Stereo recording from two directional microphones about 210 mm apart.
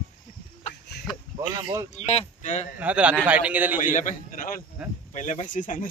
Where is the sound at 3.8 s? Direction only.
35° left (ahead or behind).